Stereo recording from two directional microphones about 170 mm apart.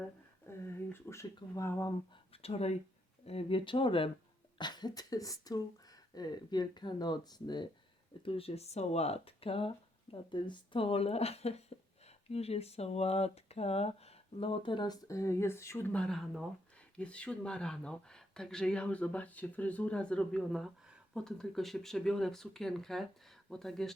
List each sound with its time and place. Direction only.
0.5 s a sound: 15° left (ahead or behind)
0.9 s speech: 15° left (ahead or behind)
2.3 s speech: 35° left (ahead or behind); by 23.9 s 5° left (ahead or behind)